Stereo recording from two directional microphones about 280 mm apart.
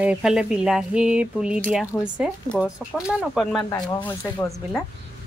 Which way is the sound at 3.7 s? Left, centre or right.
Centre.